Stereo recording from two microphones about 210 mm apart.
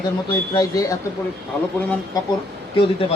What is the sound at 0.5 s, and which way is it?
Speech, 15° left (ahead or behind).